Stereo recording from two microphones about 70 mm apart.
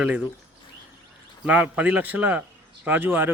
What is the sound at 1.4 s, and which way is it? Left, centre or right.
Speech, centre.